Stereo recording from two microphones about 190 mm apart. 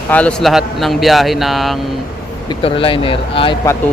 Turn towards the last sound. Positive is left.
turn(degrees=30)  # may be behind; listen again after turning